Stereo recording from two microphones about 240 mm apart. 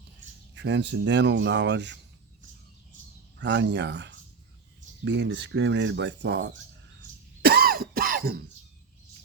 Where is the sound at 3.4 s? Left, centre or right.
Right.